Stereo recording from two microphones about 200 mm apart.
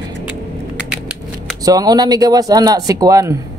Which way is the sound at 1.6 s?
20° right (ahead or behind).